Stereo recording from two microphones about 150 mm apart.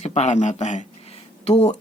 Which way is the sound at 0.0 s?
45° left (ahead or behind).